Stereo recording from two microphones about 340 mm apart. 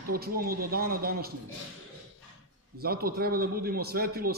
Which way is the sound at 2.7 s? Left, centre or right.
Right.